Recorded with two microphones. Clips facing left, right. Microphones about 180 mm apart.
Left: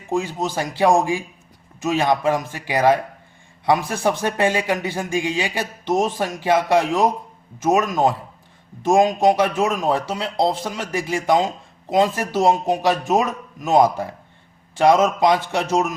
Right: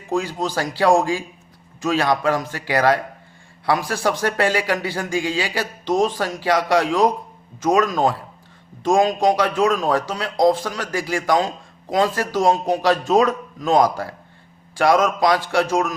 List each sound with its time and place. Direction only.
0.1 s a man's voice: 20° left (ahead or behind)